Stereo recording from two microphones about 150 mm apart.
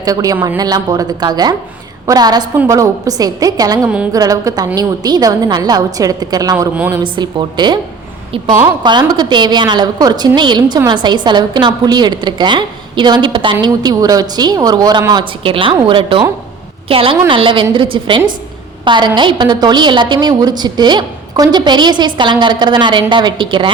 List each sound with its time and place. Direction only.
0.0 s a woman's voice: 25° right (ahead or behind)
8.8 s a woman's voice: 30° right (ahead or behind)
18.9 s a woman's voice: 30° right (ahead or behind)